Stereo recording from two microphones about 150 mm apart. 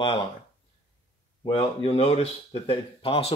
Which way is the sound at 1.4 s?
40° left (ahead or behind).